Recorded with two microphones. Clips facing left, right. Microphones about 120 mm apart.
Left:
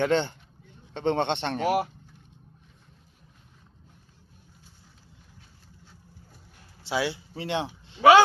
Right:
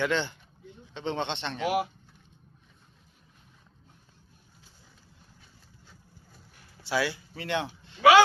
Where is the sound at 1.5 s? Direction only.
40° left (ahead or behind).